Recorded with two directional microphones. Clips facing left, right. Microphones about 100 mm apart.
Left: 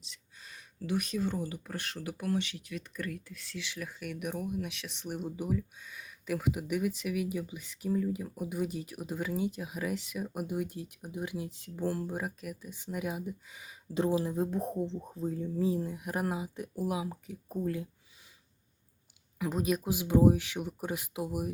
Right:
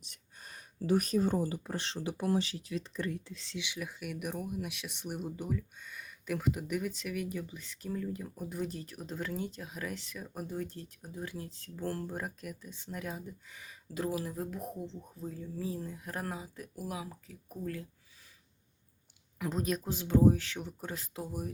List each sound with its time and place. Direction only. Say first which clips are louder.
0.1 s speech: even; 45° right (ahead or behind); by 3.6 s 25° right (ahead or behind)
3.6 s speech: even; 10° right (ahead or behind); by 17.8 s 20° left (ahead or behind)
19.4 s speech: left 3 dB; 5° left (ahead or behind)